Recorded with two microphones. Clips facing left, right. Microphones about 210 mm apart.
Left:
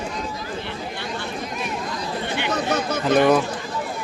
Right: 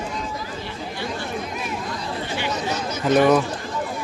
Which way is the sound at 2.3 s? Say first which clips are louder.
Left 3 dB; 55° left (ahead or behind).